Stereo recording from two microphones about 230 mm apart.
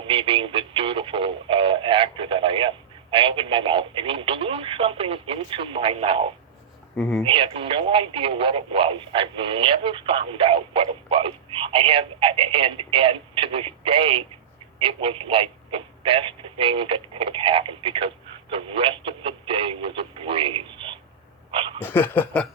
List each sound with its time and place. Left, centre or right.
0.0 s speech: right
6.9 s speech: centre
7.3 s speech: right
21.8 s a sound: centre